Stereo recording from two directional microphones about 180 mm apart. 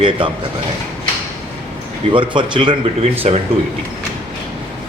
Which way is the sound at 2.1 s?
25° right (ahead or behind).